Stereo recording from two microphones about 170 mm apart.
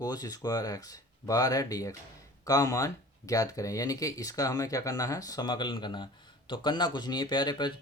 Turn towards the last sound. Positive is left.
turn(degrees=25)  # may be behind; listen again after turning